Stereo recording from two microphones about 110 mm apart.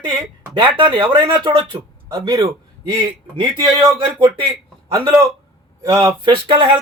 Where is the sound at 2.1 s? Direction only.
35° right (ahead or behind).